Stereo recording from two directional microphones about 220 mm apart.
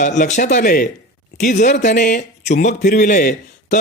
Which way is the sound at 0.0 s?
35° left (ahead or behind).